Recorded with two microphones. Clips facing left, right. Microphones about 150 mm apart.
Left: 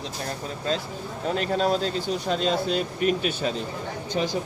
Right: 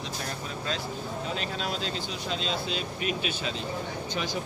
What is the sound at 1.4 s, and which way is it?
Speech, 45° left (ahead or behind).